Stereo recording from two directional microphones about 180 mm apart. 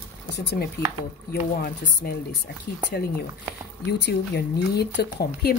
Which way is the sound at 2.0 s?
55° left (ahead or behind).